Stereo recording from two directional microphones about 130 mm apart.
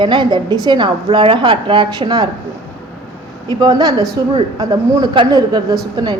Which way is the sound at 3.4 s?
30° right (ahead or behind).